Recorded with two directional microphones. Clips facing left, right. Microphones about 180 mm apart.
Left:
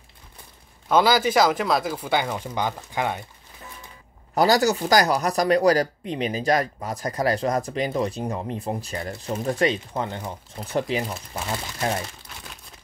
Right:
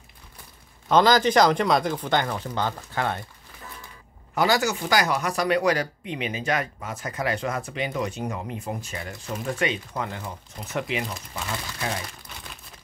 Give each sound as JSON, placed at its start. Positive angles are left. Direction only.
{"t": 0.8, "sound": "speech", "side_deg": 10}
{"t": 4.4, "sound": "speech", "side_deg": 35}